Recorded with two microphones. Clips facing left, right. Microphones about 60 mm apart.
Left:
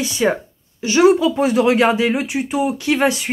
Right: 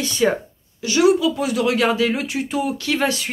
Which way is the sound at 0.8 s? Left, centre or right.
Left.